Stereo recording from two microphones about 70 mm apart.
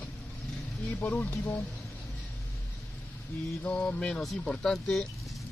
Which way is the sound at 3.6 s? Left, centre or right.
Centre.